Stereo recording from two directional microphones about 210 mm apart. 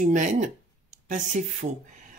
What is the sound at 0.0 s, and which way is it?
Speech, 35° right (ahead or behind).